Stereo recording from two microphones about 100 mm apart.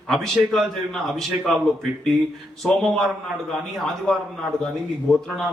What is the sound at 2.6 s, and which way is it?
Speech, 5° left (ahead or behind).